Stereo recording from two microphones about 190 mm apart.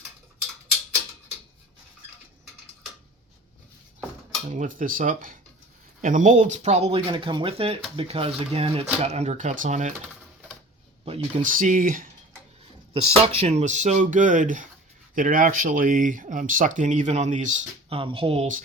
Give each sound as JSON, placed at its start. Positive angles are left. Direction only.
{"t": 4.4, "sound": "speech", "side_deg": -40}
{"t": 11.0, "sound": "a sound", "side_deg": -30}
{"t": 11.5, "sound": "speech", "side_deg": -45}
{"t": 12.9, "sound": "speech", "side_deg": -30}